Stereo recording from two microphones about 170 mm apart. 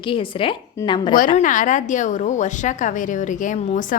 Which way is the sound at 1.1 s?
50° left (ahead or behind).